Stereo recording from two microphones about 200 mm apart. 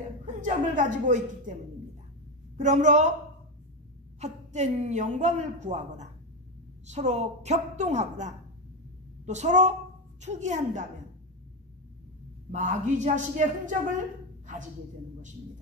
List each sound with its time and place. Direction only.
0.2 s a woman's voice: 40° right (ahead or behind)
2.5 s a woman's voice: 40° right (ahead or behind)
4.2 s a woman's voice: 35° right (ahead or behind)
12.4 s a woman's voice: 40° right (ahead or behind)
14.4 s a sound: 40° right (ahead or behind)